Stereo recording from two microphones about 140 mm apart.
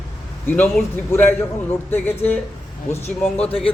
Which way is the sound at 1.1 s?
15° left (ahead or behind).